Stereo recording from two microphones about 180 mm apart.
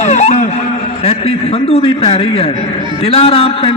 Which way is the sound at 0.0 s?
40° left (ahead or behind).